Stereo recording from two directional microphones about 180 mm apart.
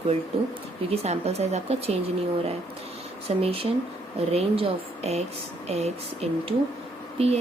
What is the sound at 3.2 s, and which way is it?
Speech, 30° right (ahead or behind).